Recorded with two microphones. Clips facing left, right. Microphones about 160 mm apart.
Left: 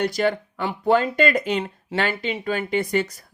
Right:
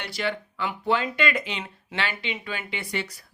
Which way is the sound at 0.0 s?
45° left (ahead or behind).